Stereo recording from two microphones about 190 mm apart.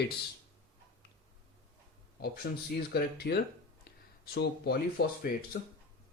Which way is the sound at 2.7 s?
55° left (ahead or behind).